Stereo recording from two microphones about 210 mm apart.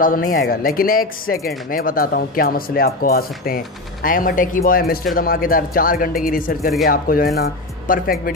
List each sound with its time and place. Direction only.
0.0 s speech: 45° left (ahead or behind)